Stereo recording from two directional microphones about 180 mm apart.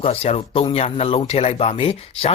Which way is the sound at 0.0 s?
35° left (ahead or behind).